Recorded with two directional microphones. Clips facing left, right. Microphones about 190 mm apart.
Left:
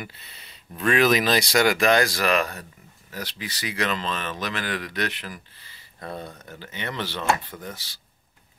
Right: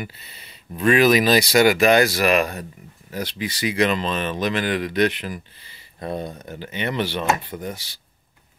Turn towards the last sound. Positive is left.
turn(degrees=-15)  # may be behind; listen again after turning